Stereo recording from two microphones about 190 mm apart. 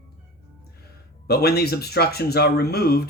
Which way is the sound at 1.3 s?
55° left (ahead or behind).